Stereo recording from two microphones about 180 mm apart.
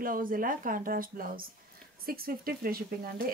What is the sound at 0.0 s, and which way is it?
A woman's voice, 50° right (ahead or behind).